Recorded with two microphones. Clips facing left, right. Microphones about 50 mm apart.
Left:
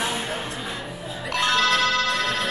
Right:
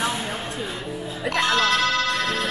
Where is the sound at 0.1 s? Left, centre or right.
Centre.